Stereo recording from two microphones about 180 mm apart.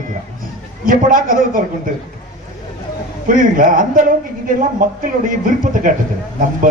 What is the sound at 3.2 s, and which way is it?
A man's voice, 45° right (ahead or behind).